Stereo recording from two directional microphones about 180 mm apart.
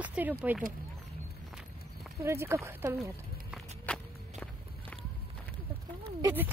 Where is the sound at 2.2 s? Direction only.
15° right (ahead or behind).